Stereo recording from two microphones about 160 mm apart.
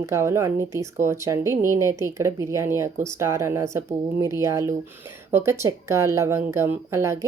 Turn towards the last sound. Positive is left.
turn(degrees=-15)  # may be behind; listen again after turning